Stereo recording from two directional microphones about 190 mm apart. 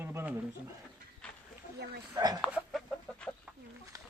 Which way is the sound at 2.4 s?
Centre (ahead or behind).